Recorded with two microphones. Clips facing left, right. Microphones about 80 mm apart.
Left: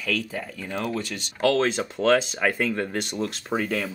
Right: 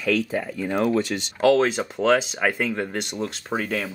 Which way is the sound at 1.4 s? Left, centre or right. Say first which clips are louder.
Right 3 dB; centre.